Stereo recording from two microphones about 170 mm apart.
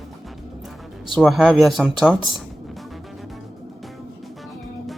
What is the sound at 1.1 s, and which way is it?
Speech, centre (ahead or behind).